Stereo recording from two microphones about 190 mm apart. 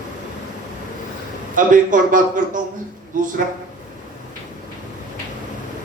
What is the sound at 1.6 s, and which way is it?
A man's voice, 45° right (ahead or behind).